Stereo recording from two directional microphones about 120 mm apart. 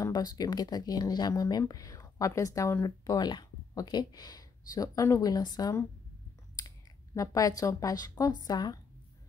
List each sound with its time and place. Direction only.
0.0 s speech: 35° left (ahead or behind)
7.2 s a woman's voice: 30° left (ahead or behind)